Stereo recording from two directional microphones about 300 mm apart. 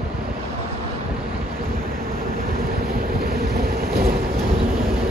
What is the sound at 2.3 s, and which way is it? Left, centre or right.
Vehicle, right.